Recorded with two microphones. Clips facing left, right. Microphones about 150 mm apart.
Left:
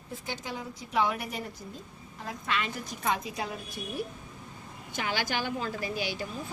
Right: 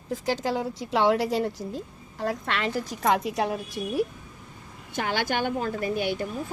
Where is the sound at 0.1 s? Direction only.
90° right.